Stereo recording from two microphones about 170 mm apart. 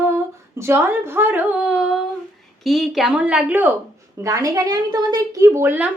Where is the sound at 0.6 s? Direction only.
15° right (ahead or behind).